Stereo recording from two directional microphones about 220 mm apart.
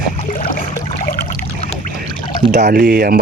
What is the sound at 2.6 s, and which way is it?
Speech, 40° right (ahead or behind).